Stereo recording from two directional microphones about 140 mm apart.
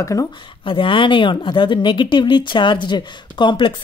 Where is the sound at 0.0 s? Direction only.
25° left (ahead or behind).